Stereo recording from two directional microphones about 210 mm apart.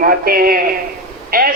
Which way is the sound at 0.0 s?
45° right (ahead or behind).